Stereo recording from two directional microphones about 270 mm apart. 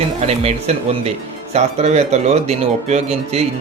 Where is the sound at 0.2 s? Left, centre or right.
Right.